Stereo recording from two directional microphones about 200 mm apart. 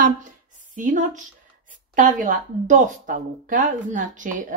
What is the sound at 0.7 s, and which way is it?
A woman's voice, 40° right (ahead or behind).